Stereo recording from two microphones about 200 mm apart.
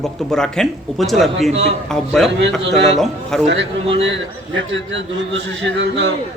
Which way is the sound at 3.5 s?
65° right (ahead or behind).